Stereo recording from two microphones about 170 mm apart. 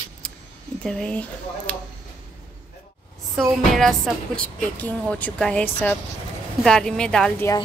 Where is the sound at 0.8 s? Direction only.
5° left (ahead or behind).